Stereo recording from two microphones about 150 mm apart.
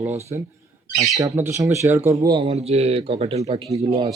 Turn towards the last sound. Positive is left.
turn(degrees=-40)  # may be behind; listen again after turning